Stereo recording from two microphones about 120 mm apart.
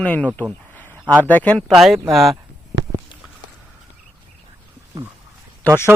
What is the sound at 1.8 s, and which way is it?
Speech, centre (ahead or behind).